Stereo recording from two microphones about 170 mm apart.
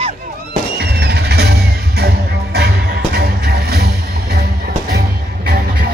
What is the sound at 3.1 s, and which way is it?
Vehicle, 70° right (ahead or behind).